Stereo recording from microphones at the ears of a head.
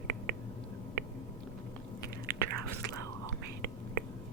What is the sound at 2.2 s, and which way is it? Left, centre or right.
Whispering, right.